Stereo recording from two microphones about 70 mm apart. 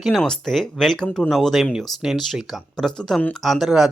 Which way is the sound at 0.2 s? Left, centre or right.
Centre.